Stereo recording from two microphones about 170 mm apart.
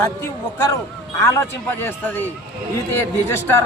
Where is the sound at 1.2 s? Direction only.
15° left (ahead or behind).